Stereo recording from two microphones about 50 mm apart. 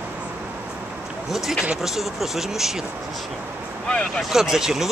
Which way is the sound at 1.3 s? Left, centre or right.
Centre.